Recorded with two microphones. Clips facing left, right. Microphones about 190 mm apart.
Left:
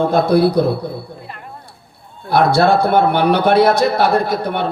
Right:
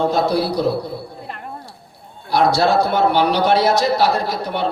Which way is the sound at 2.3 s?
55° left (ahead or behind).